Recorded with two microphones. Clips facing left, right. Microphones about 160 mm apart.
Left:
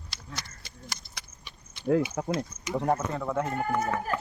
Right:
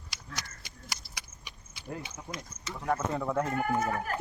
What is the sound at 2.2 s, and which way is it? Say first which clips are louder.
Speech: left 13 dB; 80° left.